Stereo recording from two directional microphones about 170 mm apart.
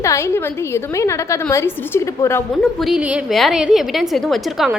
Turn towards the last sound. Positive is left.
turn(degrees=0)  # may be behind; listen again after turning